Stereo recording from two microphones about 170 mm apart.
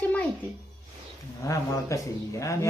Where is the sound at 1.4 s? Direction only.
20° left (ahead or behind).